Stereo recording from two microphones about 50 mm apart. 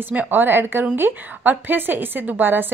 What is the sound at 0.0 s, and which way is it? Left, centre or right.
A woman's voice, right.